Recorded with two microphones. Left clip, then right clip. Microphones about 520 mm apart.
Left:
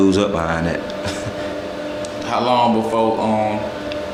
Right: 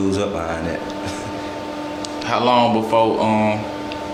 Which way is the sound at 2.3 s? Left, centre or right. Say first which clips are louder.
Even; right.